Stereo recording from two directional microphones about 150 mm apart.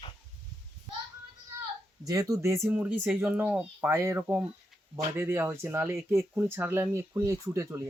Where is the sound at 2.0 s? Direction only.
25° right (ahead or behind).